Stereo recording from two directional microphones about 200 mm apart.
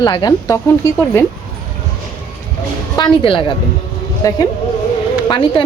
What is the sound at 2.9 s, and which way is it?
A woman's voice, 25° left (ahead or behind).